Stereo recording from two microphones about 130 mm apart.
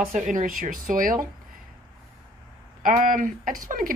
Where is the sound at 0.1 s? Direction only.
90° right.